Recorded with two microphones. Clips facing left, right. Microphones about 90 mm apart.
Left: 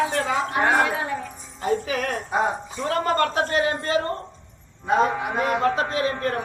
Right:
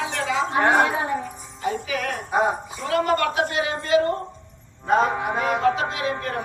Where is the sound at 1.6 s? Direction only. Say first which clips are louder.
Left 2 dB; 45° left (ahead or behind).